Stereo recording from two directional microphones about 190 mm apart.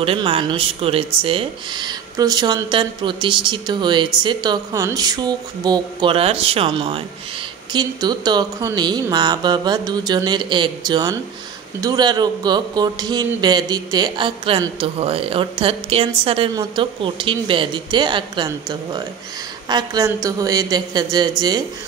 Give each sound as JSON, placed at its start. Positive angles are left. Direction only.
{"t": 0.0, "sound": "a man's voice", "side_deg": -30}